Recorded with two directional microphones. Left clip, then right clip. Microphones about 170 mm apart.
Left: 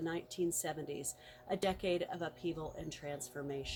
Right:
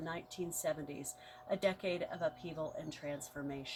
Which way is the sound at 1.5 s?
35° left (ahead or behind).